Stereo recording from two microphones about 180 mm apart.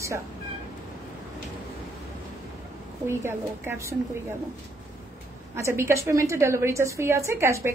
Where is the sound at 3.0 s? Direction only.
15° right (ahead or behind).